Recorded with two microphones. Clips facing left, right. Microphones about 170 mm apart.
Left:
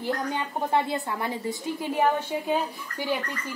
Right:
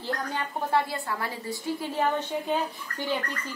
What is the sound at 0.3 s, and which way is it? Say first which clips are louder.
A woman's voice: right 2 dB; 20° left (ahead or behind).